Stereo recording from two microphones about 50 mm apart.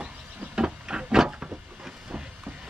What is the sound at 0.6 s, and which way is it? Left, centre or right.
Printer, centre.